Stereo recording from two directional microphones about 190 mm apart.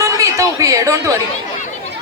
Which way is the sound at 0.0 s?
15° right (ahead or behind).